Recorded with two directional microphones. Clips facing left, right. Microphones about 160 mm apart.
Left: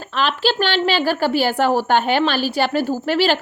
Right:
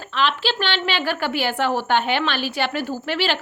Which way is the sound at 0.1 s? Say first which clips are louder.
Left 3 dB; 40° left (ahead or behind).